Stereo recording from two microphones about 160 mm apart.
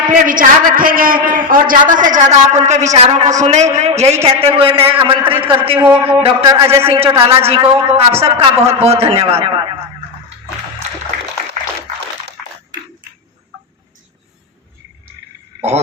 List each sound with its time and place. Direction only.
0.1 s a man's voice: 60° right (ahead or behind); by 9.5 s 40° right (ahead or behind)